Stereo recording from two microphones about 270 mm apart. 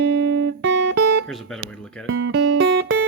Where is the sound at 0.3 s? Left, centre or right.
Right.